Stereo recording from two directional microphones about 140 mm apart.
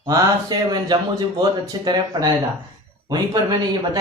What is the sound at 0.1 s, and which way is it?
Speech, 30° right (ahead or behind).